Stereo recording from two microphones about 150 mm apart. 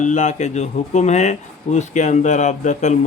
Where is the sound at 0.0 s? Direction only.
55° left (ahead or behind).